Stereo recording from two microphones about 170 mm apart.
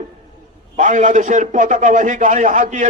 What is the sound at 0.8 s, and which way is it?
A man's voice, 50° right (ahead or behind).